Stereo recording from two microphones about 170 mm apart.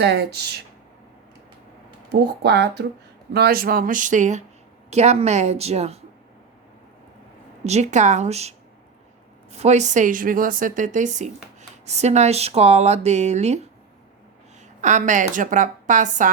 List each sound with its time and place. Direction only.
0.0 s speech: 75° right (ahead or behind)
2.1 s speech: 75° right (ahead or behind)
3.3 s a woman's voice: 65° right (ahead or behind); by 6.0 s 40° right (ahead or behind)
7.6 s a woman's voice: 40° right (ahead or behind)
14.8 s a woman's voice: 45° right (ahead or behind)